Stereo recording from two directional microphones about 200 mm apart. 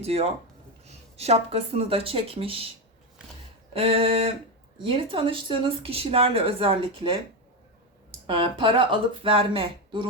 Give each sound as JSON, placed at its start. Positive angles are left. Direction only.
{"t": 0.0, "sound": "speech", "side_deg": -30}
{"t": 3.7, "sound": "speech", "side_deg": -30}
{"t": 8.3, "sound": "speech", "side_deg": -25}